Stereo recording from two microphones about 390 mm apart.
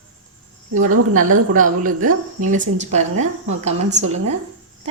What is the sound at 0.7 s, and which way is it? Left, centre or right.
Speech, right.